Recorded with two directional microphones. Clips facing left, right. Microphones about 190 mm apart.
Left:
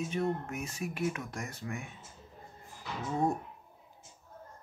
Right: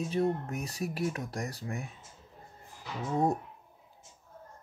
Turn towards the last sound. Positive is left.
turn(degrees=-35)  # may be behind; listen again after turning